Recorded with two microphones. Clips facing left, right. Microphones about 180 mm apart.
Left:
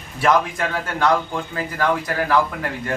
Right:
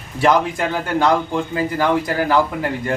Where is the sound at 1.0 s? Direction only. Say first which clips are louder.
Right 2 dB; 25° right (ahead or behind).